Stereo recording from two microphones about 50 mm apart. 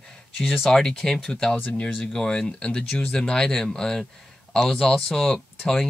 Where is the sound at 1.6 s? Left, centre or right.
Left.